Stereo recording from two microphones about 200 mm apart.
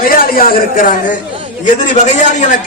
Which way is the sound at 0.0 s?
45° left (ahead or behind).